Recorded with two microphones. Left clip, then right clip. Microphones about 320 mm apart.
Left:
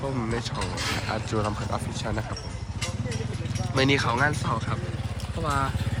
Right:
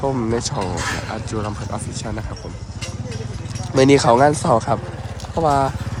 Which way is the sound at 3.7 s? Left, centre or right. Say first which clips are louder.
Right 11 dB; centre.